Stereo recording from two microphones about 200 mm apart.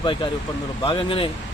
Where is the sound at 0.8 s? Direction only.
25° left (ahead or behind).